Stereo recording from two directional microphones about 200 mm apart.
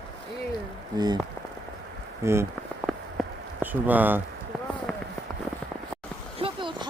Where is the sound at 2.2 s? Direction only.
15° right (ahead or behind).